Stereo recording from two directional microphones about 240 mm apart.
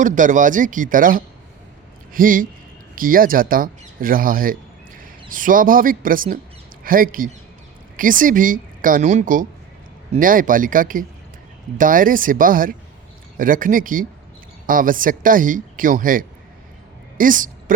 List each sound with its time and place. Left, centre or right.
0.0 s a woman's voice: right